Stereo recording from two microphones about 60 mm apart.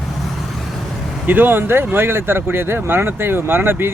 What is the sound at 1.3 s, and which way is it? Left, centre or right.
Speech, right.